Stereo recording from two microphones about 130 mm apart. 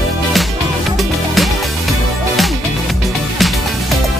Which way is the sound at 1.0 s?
Centre (ahead or behind).